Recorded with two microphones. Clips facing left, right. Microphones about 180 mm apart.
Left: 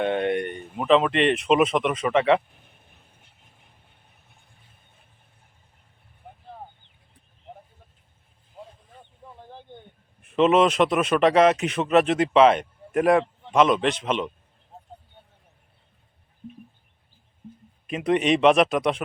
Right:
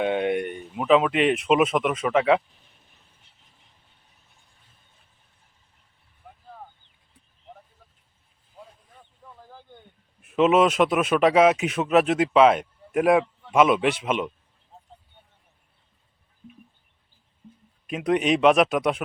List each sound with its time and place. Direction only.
0.0 s a sound: 5° right (ahead or behind)
0.8 s speech: 5° right (ahead or behind)
2.5 s vehicle: 55° left (ahead or behind)
9.2 s a sound: 25° left (ahead or behind)
10.2 s speech: 5° right (ahead or behind)
17.8 s speech: centre (ahead or behind)